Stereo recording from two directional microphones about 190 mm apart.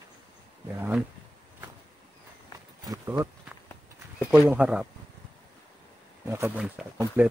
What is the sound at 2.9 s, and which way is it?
Speech, 20° right (ahead or behind).